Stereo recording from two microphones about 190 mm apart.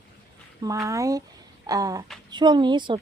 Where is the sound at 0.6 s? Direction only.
15° right (ahead or behind).